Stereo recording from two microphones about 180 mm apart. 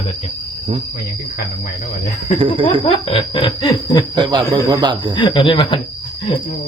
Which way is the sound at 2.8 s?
30° left (ahead or behind).